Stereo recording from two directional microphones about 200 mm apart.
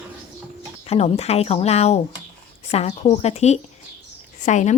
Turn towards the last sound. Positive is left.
turn(degrees=35)  # may be behind; listen again after turning